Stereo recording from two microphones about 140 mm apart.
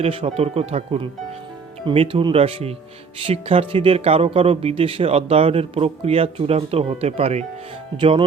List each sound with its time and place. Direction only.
0.0 s speech: 40° right (ahead or behind)